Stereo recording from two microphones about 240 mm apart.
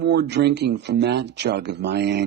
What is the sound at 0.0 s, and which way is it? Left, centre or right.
Speech, right.